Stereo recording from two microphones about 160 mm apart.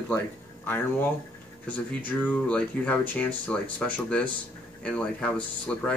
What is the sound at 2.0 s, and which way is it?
Speech, 10° left (ahead or behind).